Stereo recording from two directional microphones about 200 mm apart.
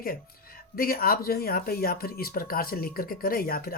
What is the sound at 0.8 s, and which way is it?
Speech, 45° left (ahead or behind).